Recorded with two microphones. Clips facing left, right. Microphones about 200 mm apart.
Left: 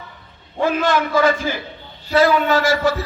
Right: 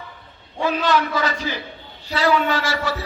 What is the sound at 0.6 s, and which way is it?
A man's voice, 50° left (ahead or behind).